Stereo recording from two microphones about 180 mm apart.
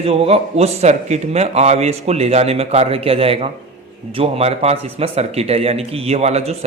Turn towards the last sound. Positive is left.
turn(degrees=-35)  # may be behind; listen again after turning